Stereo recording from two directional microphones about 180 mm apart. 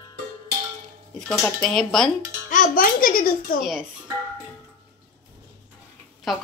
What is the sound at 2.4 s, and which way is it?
A child's voice, 50° left (ahead or behind).